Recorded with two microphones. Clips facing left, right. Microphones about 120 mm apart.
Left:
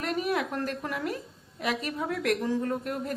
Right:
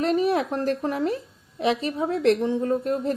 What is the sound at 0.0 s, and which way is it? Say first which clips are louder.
A woman's voice: right 7 dB; 35° right (ahead or behind).